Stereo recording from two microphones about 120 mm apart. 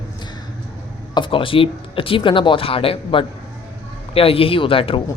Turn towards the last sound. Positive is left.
turn(degrees=50)  # may be behind; listen again after turning